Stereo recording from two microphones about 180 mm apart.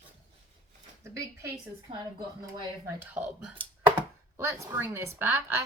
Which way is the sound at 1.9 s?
30° right (ahead or behind).